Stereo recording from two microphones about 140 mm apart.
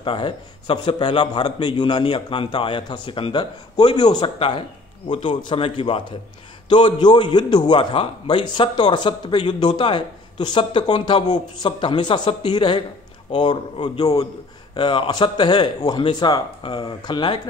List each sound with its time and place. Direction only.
0.0 s speech: 40° left (ahead or behind)